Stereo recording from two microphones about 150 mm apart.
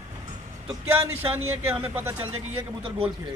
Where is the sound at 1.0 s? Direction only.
15° right (ahead or behind).